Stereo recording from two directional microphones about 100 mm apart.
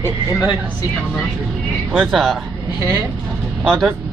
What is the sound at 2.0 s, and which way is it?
Speech, centre (ahead or behind).